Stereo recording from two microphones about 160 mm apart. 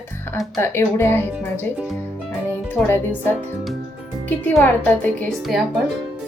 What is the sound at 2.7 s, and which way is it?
Speech, 15° left (ahead or behind).